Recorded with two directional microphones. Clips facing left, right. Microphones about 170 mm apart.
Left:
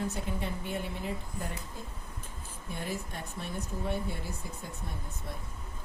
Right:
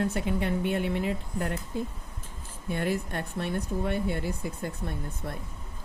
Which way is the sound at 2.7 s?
70° right (ahead or behind).